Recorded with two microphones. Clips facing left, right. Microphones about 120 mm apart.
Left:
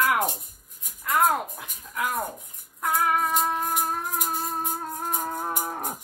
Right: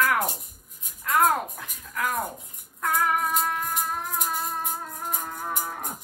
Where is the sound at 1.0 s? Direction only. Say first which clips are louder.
Right 1 dB; centre (ahead or behind).